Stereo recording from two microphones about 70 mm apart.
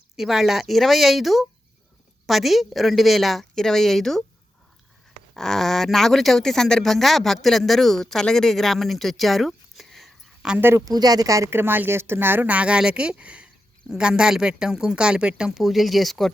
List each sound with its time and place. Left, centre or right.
0.2 s speech: centre
5.3 s speech: centre
10.6 s speech: right
10.8 s speech: right
11.5 s speech: right; by 15.6 s centre
15.6 s speech: centre